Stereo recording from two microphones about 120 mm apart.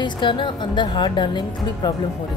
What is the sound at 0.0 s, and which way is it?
Speech, 40° left (ahead or behind).